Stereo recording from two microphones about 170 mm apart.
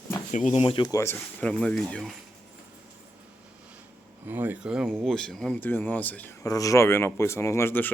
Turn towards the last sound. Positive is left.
turn(degrees=15)  # may be behind; listen again after turning